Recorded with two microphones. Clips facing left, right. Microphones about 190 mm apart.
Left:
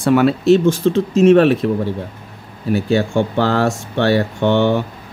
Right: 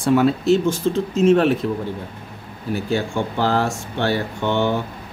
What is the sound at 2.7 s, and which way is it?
Speech, 70° left (ahead or behind).